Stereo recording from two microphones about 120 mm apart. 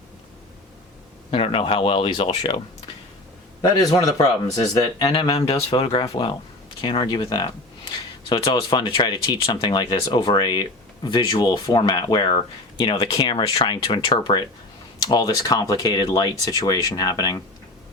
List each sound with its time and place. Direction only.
1.3 s speech: 50° left (ahead or behind)
3.6 s speech: 30° left (ahead or behind)
5.3 s speech: 55° left (ahead or behind); by 17.4 s 30° left (ahead or behind)